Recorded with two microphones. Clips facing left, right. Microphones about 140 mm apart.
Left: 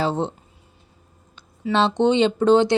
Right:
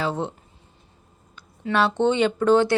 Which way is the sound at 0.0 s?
30° left (ahead or behind).